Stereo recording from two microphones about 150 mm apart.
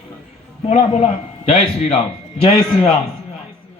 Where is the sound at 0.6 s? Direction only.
40° left (ahead or behind).